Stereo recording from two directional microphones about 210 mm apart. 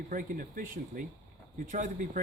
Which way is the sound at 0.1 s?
40° right (ahead or behind).